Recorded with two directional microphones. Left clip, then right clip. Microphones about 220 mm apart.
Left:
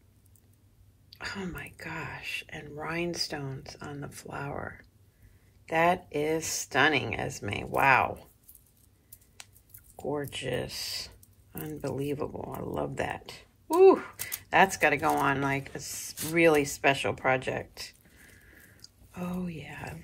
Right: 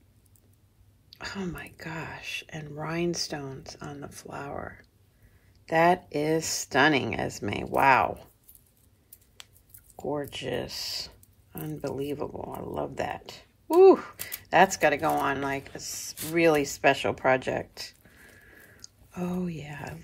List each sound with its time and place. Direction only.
1.1 s speech: 15° right (ahead or behind)
9.9 s speech: 15° right (ahead or behind)